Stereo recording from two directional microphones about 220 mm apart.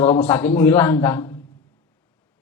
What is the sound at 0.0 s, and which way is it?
A man's voice, 10° left (ahead or behind).